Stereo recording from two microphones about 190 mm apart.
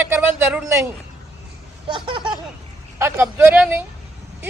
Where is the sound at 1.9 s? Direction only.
25° right (ahead or behind).